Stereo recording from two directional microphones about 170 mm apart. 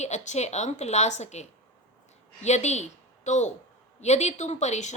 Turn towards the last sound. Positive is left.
turn(degrees=40)  # may be behind; listen again after turning